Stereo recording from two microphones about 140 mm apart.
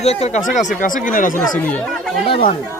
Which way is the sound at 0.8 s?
70° left (ahead or behind).